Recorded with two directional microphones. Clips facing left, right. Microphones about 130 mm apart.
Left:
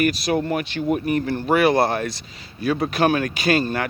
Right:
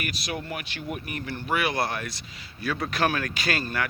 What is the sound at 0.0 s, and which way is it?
Speech, 40° left (ahead or behind).